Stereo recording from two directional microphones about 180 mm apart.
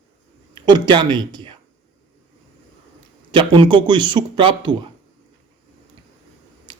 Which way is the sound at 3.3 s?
25° right (ahead or behind).